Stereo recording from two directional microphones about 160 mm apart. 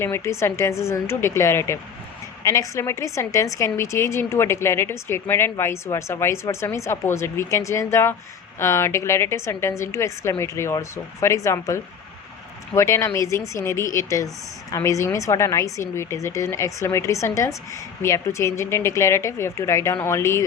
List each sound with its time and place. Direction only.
0.0 s a woman's voice: 15° left (ahead or behind)